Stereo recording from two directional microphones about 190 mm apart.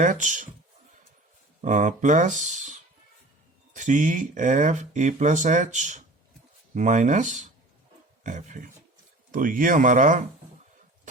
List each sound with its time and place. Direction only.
0.0 s speech: 40° right (ahead or behind)
1.6 s speech: 40° right (ahead or behind)